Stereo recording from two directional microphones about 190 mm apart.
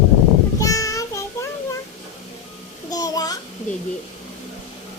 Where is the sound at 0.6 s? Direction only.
15° left (ahead or behind).